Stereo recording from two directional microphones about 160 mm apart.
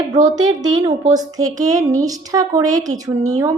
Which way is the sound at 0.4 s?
25° right (ahead or behind).